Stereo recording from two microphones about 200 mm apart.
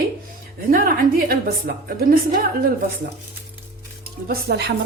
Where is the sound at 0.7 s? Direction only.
45° right (ahead or behind).